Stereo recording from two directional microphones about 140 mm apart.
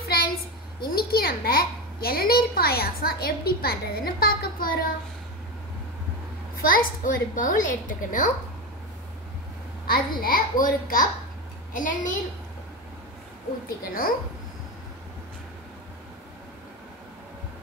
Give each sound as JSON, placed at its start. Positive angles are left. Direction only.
{"t": 0.8, "sound": "a child's voice", "side_deg": 90}
{"t": 6.6, "sound": "a woman's voice", "side_deg": 90}
{"t": 9.8, "sound": "a child's voice", "side_deg": 90}
{"t": 11.7, "sound": "a woman's voice", "side_deg": 70}
{"t": 13.7, "sound": "a woman's voice", "side_deg": 90}